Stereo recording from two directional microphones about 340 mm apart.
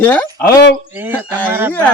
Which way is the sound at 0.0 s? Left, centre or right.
Centre.